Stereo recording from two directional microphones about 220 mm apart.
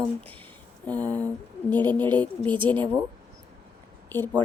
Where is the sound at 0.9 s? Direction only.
5° left (ahead or behind).